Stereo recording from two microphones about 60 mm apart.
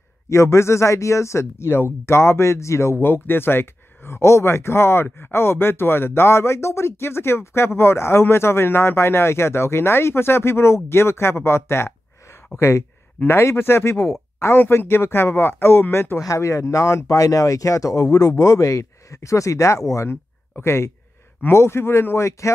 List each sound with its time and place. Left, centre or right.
0.3 s speech: left
3.1 s speech: left
16.3 s speech: left
20.1 s speech: left